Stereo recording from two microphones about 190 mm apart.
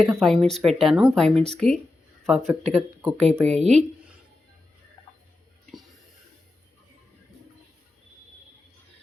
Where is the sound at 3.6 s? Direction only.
35° right (ahead or behind).